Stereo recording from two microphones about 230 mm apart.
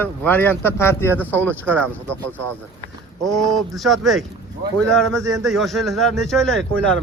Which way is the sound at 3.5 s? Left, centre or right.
Centre.